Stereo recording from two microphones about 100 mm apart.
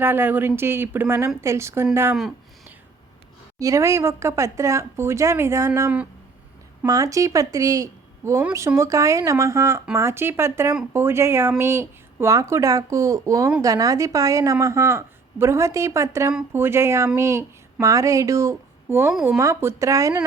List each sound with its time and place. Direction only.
0.0 s speech: 20° right (ahead or behind)
3.6 s a woman's voice: 30° right (ahead or behind)